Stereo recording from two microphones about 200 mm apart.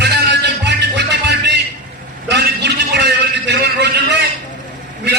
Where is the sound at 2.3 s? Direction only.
55° right (ahead or behind).